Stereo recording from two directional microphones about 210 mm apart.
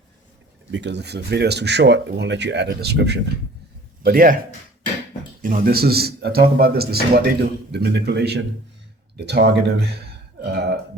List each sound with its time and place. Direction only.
0.7 s speech: 55° right (ahead or behind)
5.4 s speech: 40° right (ahead or behind)